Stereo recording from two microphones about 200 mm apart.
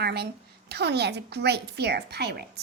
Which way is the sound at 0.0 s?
55° right (ahead or behind).